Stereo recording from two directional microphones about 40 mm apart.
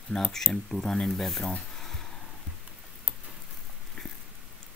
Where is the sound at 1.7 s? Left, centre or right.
Centre.